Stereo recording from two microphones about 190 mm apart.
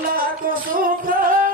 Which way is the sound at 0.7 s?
45° right (ahead or behind).